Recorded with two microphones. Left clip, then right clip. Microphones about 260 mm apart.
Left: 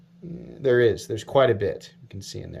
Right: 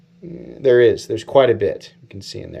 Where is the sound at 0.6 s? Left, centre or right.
Centre.